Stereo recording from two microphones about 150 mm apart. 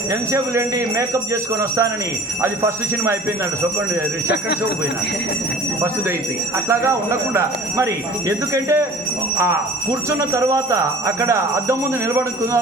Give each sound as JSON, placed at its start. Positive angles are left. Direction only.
{"t": 0.1, "sound": "speech", "side_deg": -20}
{"t": 2.4, "sound": "music", "side_deg": -15}
{"t": 6.7, "sound": "speech", "side_deg": -15}
{"t": 10.1, "sound": "speech", "side_deg": -20}